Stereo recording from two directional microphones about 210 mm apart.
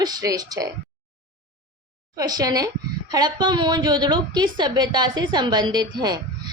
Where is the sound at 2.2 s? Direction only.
20° right (ahead or behind).